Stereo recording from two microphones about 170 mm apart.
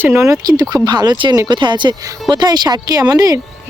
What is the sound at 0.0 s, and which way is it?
Speech, 15° right (ahead or behind).